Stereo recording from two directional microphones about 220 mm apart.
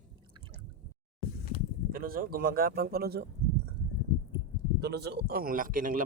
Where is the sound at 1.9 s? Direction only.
40° right (ahead or behind).